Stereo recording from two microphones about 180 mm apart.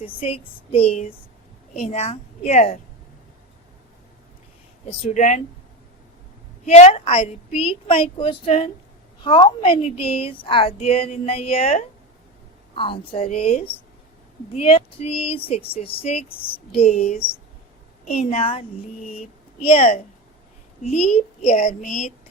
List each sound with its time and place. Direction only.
0.2 s speech: 35° left (ahead or behind)
4.9 s speech: 35° left (ahead or behind)
6.7 s a woman's voice: 35° left (ahead or behind)
19.6 s speech: 35° left (ahead or behind)